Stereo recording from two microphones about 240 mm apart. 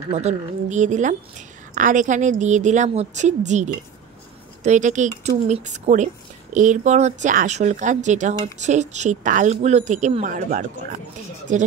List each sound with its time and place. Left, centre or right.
0.1 s a woman's voice: right